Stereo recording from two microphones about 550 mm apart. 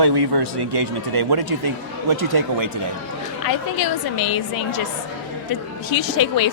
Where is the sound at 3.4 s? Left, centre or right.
Left.